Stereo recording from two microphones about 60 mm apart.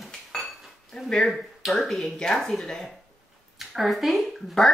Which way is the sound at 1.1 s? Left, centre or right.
Centre.